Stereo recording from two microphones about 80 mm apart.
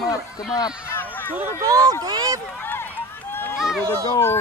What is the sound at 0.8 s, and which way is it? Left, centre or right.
Run, left.